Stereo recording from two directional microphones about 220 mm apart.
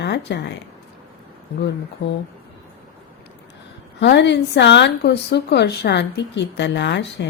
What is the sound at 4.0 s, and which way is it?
Speech, 50° left (ahead or behind).